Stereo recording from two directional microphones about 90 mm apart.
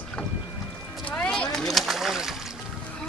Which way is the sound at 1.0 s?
10° left (ahead or behind).